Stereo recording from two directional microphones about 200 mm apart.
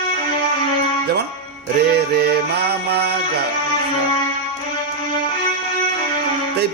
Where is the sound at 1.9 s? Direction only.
50° right (ahead or behind).